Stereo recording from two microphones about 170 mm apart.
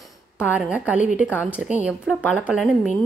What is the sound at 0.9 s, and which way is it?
Speech, 50° left (ahead or behind).